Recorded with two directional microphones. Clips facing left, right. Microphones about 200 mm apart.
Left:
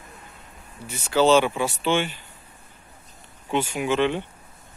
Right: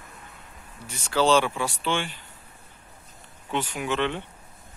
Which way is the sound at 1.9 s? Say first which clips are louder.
Left 6 dB; 5° left (ahead or behind).